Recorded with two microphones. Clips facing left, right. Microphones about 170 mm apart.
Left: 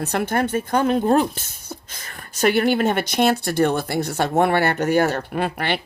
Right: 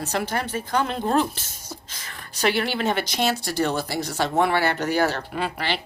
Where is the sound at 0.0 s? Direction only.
55° left (ahead or behind).